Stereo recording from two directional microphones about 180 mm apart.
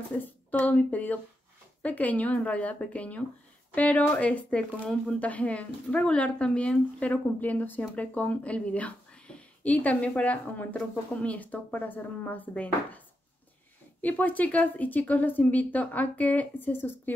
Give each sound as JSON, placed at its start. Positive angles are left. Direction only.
{"t": 0.1, "sound": "speech", "side_deg": 10}
{"t": 14.0, "sound": "speech", "side_deg": 10}